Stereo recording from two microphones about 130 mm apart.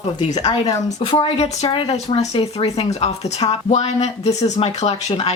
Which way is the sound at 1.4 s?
50° left (ahead or behind).